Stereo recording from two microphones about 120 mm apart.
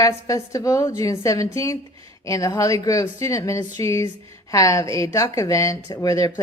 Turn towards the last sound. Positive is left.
turn(degrees=30)  # may be behind; listen again after turning